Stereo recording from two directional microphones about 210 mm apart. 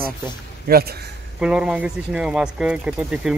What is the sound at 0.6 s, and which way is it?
Speech, 45° right (ahead or behind).